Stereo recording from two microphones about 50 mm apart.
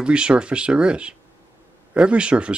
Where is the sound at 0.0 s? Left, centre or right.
Right.